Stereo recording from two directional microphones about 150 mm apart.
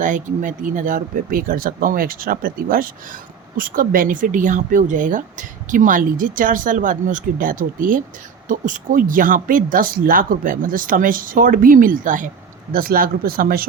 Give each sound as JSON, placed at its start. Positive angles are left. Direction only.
{"t": 0.0, "sound": "speech", "side_deg": -60}